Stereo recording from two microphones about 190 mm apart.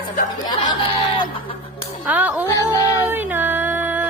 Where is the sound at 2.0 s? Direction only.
10° right (ahead or behind).